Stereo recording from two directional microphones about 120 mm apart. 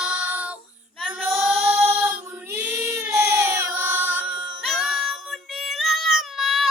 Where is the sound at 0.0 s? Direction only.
10° right (ahead or behind).